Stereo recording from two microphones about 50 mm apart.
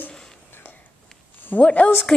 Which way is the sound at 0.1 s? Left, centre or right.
Centre.